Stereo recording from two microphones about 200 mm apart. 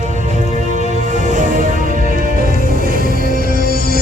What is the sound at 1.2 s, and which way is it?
Music, 40° right (ahead or behind).